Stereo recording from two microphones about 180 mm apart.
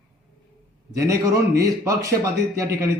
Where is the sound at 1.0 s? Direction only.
15° right (ahead or behind).